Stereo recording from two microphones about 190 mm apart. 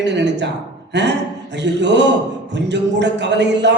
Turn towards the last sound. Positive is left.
turn(degrees=-65)  # may be behind; listen again after turning